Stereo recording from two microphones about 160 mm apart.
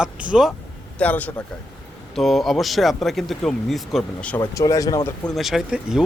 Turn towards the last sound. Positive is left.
turn(degrees=-5)  # may be behind; listen again after turning